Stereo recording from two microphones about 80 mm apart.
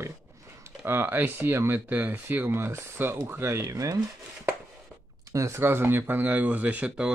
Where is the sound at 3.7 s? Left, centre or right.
Right.